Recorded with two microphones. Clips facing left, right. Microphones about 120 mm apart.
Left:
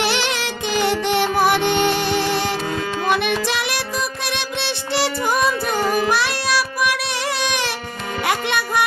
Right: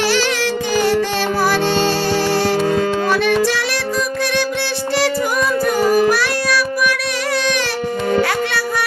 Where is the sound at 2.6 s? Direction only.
40° right (ahead or behind).